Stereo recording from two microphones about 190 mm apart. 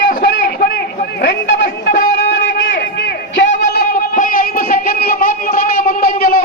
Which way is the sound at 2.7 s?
55° left (ahead or behind).